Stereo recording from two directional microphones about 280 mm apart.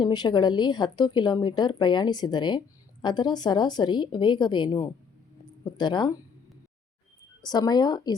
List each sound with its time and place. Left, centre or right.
0.0 s a woman's voice: centre
7.4 s a woman's voice: centre